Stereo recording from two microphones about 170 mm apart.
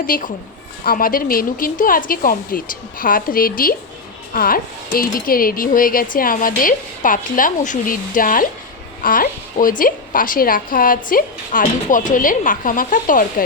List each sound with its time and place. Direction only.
0.0 s a woman's voice: 55° left (ahead or behind)